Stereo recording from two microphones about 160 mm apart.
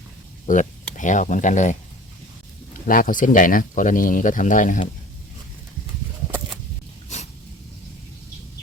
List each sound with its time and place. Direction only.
0.4 s speech: 50° left (ahead or behind)
2.8 s speech: 60° left (ahead or behind)